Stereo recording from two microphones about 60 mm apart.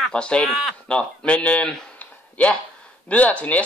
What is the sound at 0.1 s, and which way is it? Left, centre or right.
Speech, centre.